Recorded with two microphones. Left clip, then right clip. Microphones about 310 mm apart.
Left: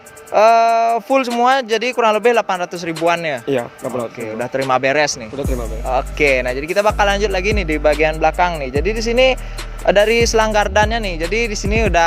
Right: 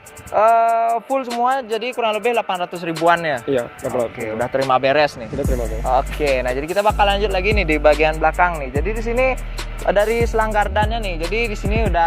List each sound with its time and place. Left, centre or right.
0.3 s music: left
1.4 s speech: left
3.1 s speech: centre
3.4 s speech: left
8.2 s speech: left
10.3 s music: left
11.3 s speech: left